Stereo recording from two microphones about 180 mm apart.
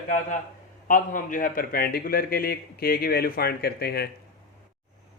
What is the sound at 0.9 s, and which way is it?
A man's voice, 50° left (ahead or behind).